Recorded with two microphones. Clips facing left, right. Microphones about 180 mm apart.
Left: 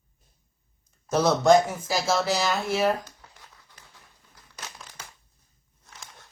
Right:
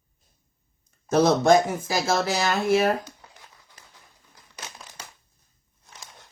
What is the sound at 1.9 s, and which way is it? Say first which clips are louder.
Speech: even; 55° right (ahead or behind).